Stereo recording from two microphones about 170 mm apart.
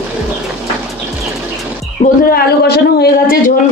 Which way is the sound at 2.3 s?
70° left (ahead or behind).